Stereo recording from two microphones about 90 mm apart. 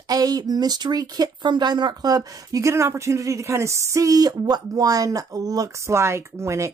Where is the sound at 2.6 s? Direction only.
30° right (ahead or behind).